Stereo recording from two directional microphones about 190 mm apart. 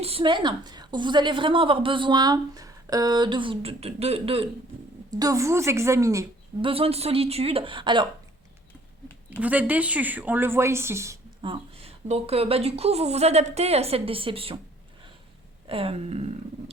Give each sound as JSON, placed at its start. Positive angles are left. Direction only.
{"t": 0.0, "sound": "a woman's voice", "side_deg": -30}
{"t": 5.2, "sound": "a woman's voice", "side_deg": -15}
{"t": 6.6, "sound": "a woman's voice", "side_deg": -30}
{"t": 9.4, "sound": "a woman's voice", "side_deg": -10}
{"t": 11.4, "sound": "a woman's voice", "side_deg": -30}
{"t": 15.6, "sound": "a woman's voice", "side_deg": -30}